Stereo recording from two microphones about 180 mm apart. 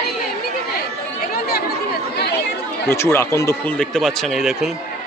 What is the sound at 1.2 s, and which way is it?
Chatter, 55° left (ahead or behind).